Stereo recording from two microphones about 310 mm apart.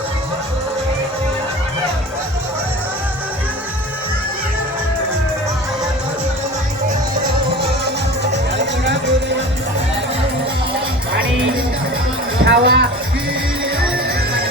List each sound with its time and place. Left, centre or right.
8.3 s music: right
12.5 s music: right